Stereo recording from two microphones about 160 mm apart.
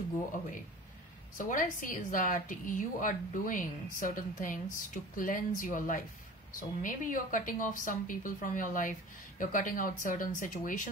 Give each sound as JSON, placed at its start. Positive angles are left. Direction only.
{"t": 1.4, "sound": "a woman's voice", "side_deg": 55}